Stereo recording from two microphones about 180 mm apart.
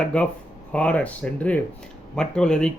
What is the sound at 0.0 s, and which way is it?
Speech, 5° left (ahead or behind).